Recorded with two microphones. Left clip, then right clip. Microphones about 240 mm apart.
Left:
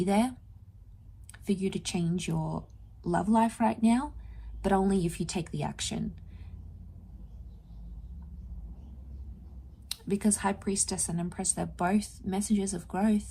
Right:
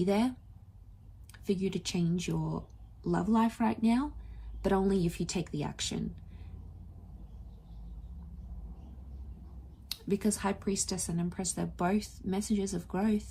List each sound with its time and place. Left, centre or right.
0.0 s speech: left
9.9 s speech: left